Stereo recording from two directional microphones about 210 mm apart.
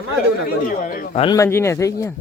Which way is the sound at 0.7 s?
40° left (ahead or behind).